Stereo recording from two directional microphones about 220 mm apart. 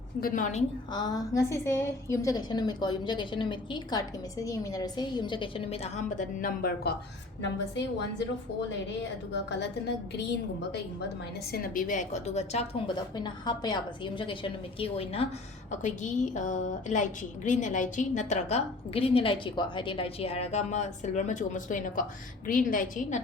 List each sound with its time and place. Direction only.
0.2 s a woman's voice: 40° left (ahead or behind)
0.9 s a woman's voice: 20° left (ahead or behind); by 6.9 s 45° left (ahead or behind)
9.3 s a woman's voice: 50° left (ahead or behind); by 23.2 s 35° left (ahead or behind)